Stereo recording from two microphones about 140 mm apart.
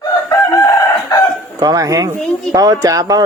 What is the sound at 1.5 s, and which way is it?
Dog, 25° right (ahead or behind).